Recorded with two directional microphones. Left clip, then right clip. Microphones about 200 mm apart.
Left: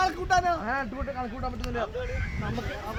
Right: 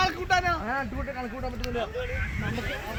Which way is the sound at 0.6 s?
Centre (ahead or behind).